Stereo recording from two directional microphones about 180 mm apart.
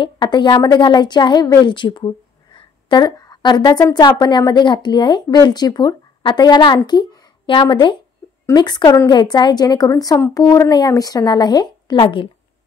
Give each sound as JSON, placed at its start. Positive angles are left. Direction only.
{"t": 0.0, "sound": "a woman's voice", "side_deg": 25}